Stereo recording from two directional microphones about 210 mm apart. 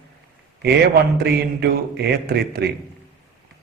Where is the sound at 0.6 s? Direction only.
50° right (ahead or behind).